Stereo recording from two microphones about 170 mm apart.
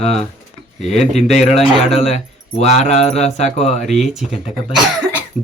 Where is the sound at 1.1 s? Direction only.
40° left (ahead or behind).